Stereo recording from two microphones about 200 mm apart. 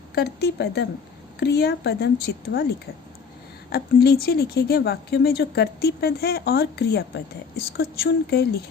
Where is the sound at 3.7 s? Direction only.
55° left (ahead or behind).